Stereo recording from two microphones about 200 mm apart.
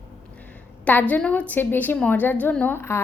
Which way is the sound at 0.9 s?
10° left (ahead or behind).